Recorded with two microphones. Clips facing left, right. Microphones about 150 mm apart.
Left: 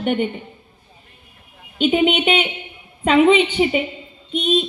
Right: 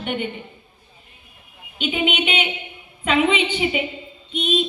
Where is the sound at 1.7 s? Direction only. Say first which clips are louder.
Left 6 dB; 40° left (ahead or behind).